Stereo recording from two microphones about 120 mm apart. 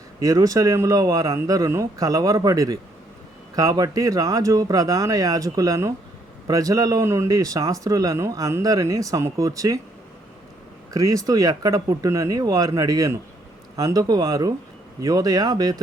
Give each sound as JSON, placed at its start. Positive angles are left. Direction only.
{"t": 0.2, "sound": "speech", "side_deg": -30}
{"t": 10.9, "sound": "speech", "side_deg": -30}